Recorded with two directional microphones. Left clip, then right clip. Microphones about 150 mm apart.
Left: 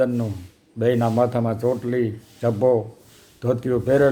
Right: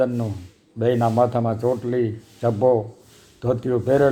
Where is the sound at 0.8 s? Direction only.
15° left (ahead or behind).